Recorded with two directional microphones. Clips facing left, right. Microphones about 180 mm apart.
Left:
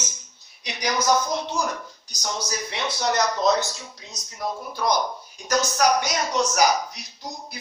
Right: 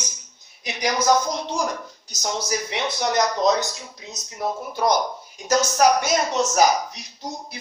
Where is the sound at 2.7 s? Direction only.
20° right (ahead or behind).